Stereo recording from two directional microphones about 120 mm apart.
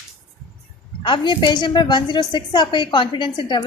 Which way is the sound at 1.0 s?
40° left (ahead or behind).